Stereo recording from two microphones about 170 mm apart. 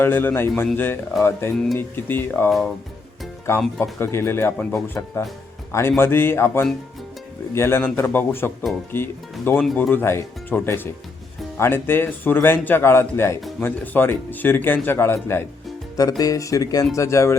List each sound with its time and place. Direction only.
0.0 s a man's voice: 10° left (ahead or behind)
1.5 s a man's voice: 5° left (ahead or behind)
2.5 s speech: centre (ahead or behind)
3.5 s a man's voice: 15° left (ahead or behind)